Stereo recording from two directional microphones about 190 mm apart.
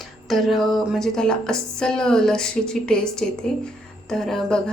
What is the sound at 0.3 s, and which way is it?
Speech, centre (ahead or behind).